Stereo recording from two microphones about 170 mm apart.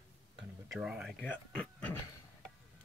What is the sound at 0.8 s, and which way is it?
Speech, 5° right (ahead or behind).